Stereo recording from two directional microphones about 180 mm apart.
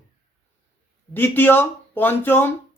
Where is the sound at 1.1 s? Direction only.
10° left (ahead or behind).